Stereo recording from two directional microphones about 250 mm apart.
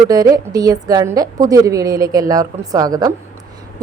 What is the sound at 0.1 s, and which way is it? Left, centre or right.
A woman's voice, centre.